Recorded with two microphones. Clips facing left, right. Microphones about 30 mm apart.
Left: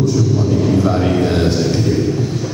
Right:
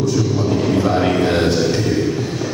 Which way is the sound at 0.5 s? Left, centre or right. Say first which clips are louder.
Left 1 dB; right.